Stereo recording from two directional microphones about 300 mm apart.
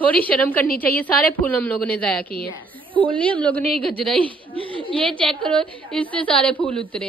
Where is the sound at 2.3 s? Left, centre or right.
Centre.